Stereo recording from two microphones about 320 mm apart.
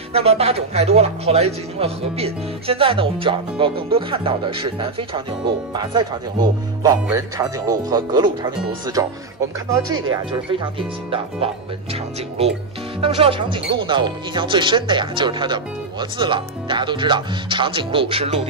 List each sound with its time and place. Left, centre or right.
0.1 s speech: centre
6.8 s speech: centre
13.0 s speech: centre